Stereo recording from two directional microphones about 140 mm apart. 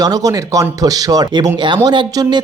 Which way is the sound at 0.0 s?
25° right (ahead or behind).